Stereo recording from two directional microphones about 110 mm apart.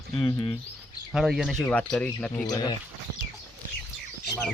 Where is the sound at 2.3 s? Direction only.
35° left (ahead or behind).